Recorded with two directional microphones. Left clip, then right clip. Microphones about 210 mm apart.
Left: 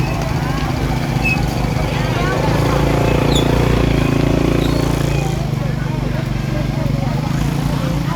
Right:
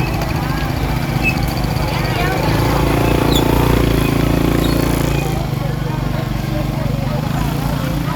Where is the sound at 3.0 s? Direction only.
30° right (ahead or behind).